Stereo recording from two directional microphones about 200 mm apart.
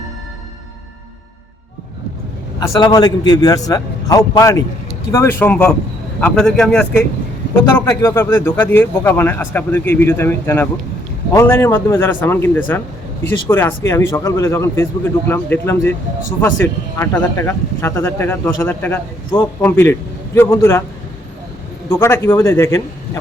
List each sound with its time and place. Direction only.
2.6 s a man's voice: 20° left (ahead or behind)
7.9 s speech: 15° left (ahead or behind)
21.8 s speech: 10° left (ahead or behind)